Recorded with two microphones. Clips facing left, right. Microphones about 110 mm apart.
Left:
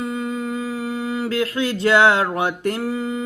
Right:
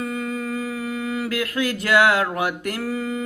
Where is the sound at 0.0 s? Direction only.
25° left (ahead or behind).